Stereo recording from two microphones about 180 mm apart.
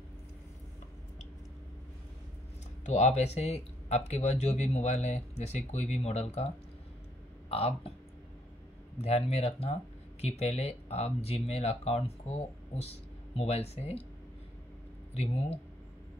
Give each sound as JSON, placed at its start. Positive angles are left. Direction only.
{"t": 2.8, "sound": "speech", "side_deg": 40}
{"t": 8.9, "sound": "speech", "side_deg": 35}